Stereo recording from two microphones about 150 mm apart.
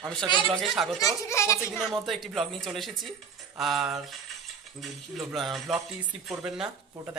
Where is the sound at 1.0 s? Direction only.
20° left (ahead or behind).